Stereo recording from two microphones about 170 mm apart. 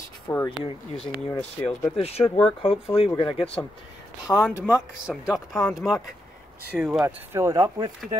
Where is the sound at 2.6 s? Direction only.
35° left (ahead or behind).